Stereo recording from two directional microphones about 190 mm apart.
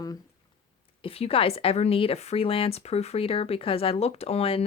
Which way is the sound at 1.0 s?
30° left (ahead or behind).